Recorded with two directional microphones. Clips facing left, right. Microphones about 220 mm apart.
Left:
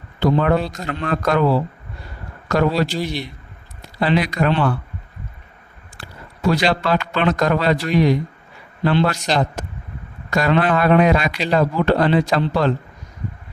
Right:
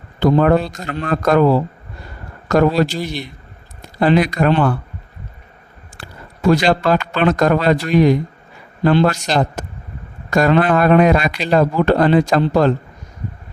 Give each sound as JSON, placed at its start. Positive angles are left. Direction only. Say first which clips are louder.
{"t": 0.2, "sound": "a man's voice", "louder": "right 4 dB", "side_deg": -45}
{"t": 6.5, "sound": "a man's voice", "louder": "right 4 dB", "side_deg": -45}